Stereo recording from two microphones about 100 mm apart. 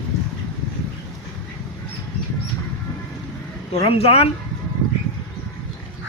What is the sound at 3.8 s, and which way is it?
Speech, 70° left (ahead or behind).